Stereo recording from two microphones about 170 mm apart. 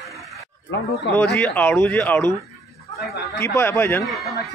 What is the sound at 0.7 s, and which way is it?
Speech, 90° left.